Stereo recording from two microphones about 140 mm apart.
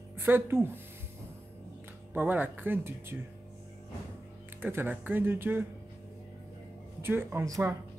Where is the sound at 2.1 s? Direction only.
15° right (ahead or behind).